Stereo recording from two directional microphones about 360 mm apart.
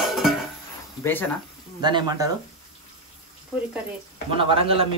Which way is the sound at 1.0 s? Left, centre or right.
Centre.